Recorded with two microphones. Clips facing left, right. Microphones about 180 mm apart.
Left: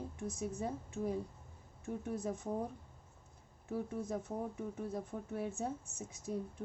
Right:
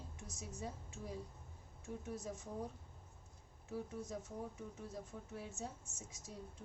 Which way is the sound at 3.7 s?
55° left (ahead or behind).